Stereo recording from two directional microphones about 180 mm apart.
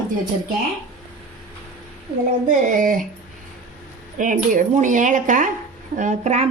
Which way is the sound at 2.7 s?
50° right (ahead or behind).